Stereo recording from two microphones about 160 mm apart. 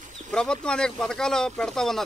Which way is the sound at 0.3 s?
5° left (ahead or behind).